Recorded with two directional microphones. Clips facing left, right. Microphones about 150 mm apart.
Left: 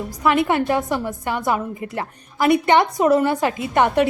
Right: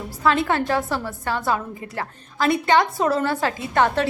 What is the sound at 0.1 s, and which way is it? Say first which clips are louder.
A woman's voice: left 2 dB; 15° left (ahead or behind).